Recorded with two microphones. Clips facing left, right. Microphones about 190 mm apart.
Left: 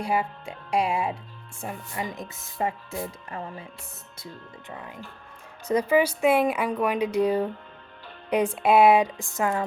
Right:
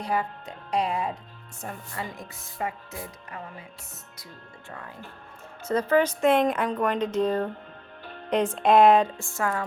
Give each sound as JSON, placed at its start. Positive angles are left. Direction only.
{"t": 0.0, "sound": "a woman's voice", "side_deg": 10}
{"t": 5.6, "sound": "a woman's voice", "side_deg": 15}